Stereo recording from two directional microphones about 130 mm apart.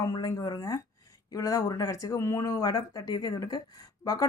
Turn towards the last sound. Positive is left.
turn(degrees=30)  # may be behind; listen again after turning